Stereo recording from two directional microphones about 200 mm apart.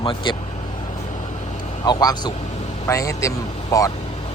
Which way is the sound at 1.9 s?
20° left (ahead or behind).